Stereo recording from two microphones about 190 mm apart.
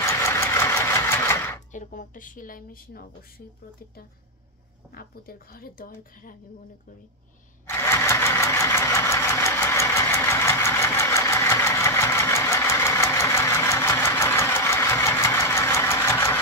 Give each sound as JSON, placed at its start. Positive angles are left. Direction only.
{"t": 0.0, "sound": "vehicle", "side_deg": 15}
{"t": 1.7, "sound": "a woman's voice", "side_deg": 45}
{"t": 4.9, "sound": "a woman's voice", "side_deg": 50}
{"t": 7.6, "sound": "sewing machine", "side_deg": 15}